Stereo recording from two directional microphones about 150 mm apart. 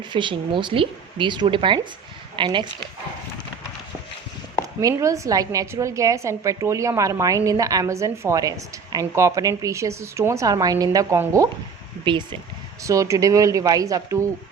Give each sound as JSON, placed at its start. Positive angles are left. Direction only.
{"t": 0.1, "sound": "speech", "side_deg": -35}
{"t": 4.8, "sound": "a woman's voice", "side_deg": -20}
{"t": 12.0, "sound": "speech", "side_deg": -30}
{"t": 12.8, "sound": "a woman's voice", "side_deg": -20}